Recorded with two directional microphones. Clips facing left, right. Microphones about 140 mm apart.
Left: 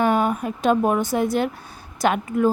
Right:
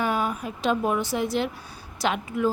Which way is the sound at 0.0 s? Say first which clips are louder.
Left 6 dB; 50° left (ahead or behind).